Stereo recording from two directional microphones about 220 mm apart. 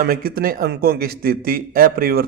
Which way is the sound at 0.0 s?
45° right (ahead or behind).